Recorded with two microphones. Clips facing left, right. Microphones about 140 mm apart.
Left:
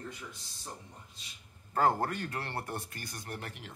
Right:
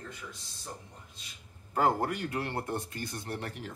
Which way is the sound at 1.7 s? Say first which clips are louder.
Right 1 dB; 15° right (ahead or behind).